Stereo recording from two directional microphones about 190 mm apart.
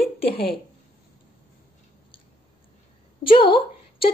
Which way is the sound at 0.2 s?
30° left (ahead or behind).